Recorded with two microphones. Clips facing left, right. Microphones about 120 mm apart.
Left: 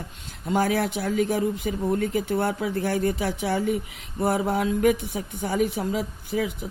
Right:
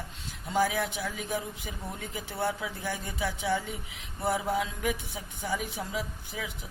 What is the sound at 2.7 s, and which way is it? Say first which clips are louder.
Speech: left 11 dB; 65° left (ahead or behind).